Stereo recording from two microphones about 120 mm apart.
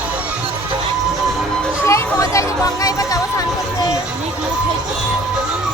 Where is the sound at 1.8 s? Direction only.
25° left (ahead or behind).